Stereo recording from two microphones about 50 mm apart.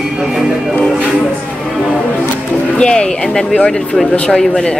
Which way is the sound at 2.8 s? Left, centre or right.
Centre.